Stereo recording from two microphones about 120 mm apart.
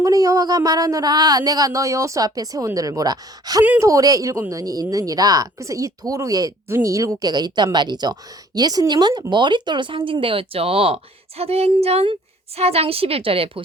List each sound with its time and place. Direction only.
0.0 s a woman's voice: 30° right (ahead or behind); by 13.5 s 50° right (ahead or behind)